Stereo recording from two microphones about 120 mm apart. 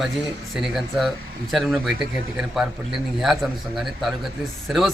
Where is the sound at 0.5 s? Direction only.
Centre (ahead or behind).